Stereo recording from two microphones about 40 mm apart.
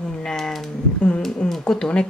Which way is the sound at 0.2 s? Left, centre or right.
Centre.